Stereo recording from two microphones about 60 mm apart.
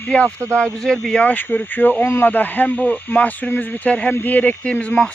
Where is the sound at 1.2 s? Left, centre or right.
Left.